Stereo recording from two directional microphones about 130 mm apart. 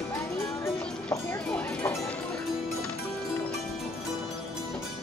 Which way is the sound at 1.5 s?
15° left (ahead or behind).